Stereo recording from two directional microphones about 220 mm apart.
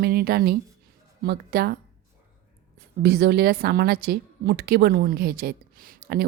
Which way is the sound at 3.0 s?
50° right (ahead or behind).